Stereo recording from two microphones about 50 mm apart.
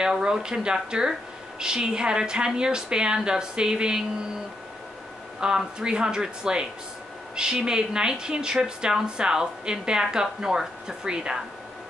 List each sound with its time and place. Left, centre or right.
0.0 s speech: centre
5.4 s speech: centre